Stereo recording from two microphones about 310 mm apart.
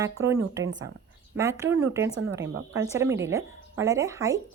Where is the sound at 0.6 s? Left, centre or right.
Right.